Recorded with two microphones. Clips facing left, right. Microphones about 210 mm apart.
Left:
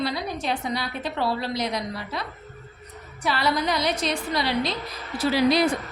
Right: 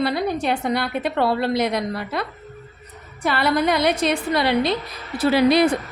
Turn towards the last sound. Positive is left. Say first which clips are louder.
# right 4 dB
turn(degrees=-60)  # may be behind; listen again after turning